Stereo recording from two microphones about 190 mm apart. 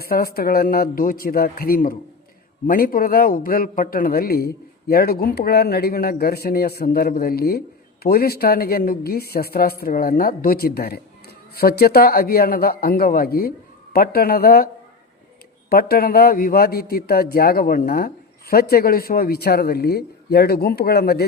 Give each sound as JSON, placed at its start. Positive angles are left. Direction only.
{"t": 0.0, "sound": "a man's voice", "side_deg": 55}
{"t": 15.7, "sound": "a man's voice", "side_deg": 55}